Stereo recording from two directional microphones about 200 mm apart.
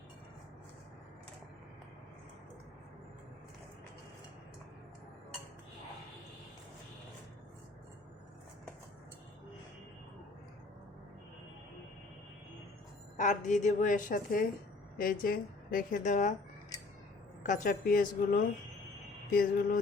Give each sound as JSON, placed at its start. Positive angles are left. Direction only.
{"t": 13.1, "sound": "a woman's voice", "side_deg": 40}
{"t": 17.4, "sound": "a woman's voice", "side_deg": 40}